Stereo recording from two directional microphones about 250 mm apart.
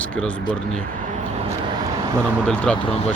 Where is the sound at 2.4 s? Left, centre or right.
Centre.